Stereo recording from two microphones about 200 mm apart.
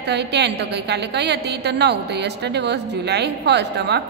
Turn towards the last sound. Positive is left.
turn(degrees=-60)  # may be behind; listen again after turning